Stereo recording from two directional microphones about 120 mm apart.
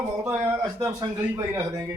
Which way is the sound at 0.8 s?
30° right (ahead or behind).